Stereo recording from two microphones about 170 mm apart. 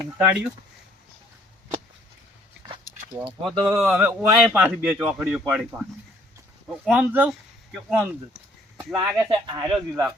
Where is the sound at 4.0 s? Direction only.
Centre (ahead or behind).